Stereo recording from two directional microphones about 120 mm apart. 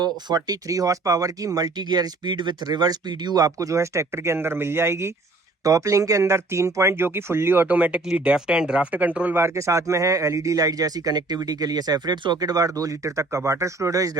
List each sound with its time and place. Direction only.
0.0 s speech: 35° right (ahead or behind); by 9.4 s 10° right (ahead or behind)
9.4 s speech: 25° right (ahead or behind)